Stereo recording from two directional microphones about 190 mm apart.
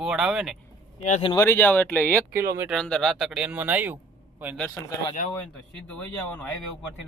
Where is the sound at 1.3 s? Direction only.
15° left (ahead or behind); by 3.9 s 10° right (ahead or behind).